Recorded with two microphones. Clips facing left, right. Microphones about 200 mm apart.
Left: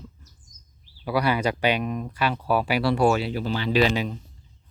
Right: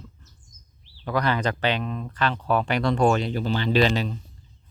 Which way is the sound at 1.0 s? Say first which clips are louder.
Left 1 dB; 10° left (ahead or behind).